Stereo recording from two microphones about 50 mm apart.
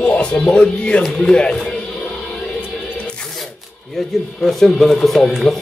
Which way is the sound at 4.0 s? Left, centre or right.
Centre.